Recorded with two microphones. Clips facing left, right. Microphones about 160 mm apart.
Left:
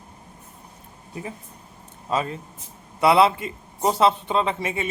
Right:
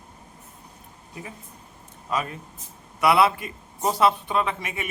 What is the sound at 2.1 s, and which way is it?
A man's voice, 25° left (ahead or behind).